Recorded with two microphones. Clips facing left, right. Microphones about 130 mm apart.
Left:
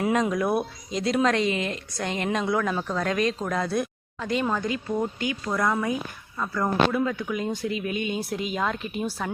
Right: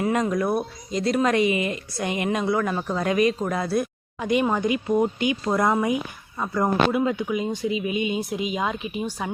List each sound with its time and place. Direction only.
0.0 s speech: centre (ahead or behind)
4.3 s speech: 15° right (ahead or behind)
7.3 s speech: 5° right (ahead or behind)